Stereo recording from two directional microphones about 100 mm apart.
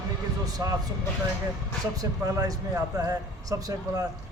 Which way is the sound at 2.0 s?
35° right (ahead or behind).